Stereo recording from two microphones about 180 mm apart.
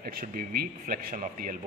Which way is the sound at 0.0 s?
55° right (ahead or behind).